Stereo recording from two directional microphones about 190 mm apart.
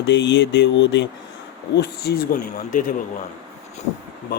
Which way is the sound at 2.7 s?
45° left (ahead or behind).